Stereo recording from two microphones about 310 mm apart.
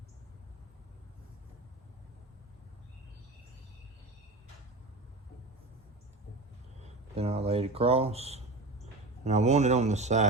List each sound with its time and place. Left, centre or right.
6.8 s speech: centre